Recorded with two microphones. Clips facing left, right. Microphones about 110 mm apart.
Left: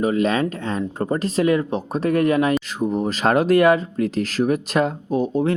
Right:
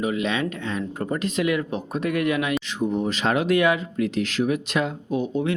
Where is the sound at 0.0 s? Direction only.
40° left (ahead or behind).